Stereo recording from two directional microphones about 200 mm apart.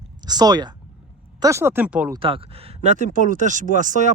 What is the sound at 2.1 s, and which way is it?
Speech, 25° right (ahead or behind).